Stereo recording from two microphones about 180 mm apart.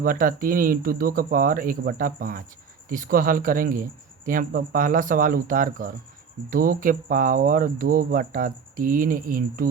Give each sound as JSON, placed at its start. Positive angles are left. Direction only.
{"t": 0.0, "sound": "speech", "side_deg": -50}